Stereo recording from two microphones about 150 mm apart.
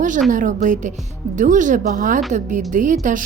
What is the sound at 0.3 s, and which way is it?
A woman's voice, 60° right (ahead or behind).